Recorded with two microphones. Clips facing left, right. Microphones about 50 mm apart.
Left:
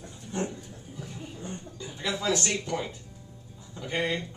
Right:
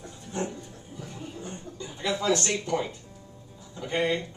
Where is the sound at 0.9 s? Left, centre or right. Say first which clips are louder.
Right 2 dB; centre.